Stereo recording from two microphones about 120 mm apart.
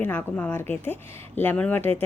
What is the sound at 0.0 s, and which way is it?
A woman's voice, 15° left (ahead or behind).